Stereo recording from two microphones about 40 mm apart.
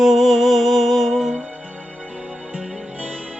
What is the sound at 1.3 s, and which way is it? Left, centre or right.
Music, centre.